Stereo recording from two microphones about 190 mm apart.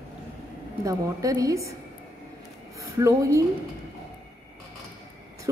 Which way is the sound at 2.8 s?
15° right (ahead or behind).